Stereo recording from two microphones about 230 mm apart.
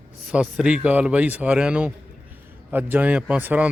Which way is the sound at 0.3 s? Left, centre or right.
Centre.